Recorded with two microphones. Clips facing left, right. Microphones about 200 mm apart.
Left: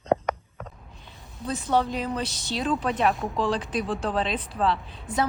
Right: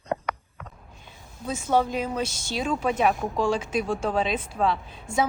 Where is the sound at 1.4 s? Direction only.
Centre (ahead or behind).